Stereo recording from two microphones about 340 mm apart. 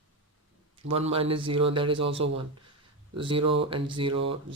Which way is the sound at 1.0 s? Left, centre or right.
Centre.